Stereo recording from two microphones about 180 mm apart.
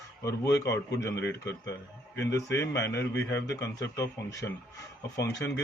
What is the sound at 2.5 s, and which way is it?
A man's voice, 15° left (ahead or behind).